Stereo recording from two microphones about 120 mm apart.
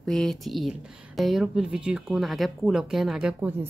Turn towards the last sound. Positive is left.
turn(degrees=-5)  # may be behind; listen again after turning